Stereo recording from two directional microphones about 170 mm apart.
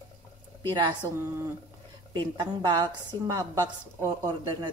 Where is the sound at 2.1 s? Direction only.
25° right (ahead or behind).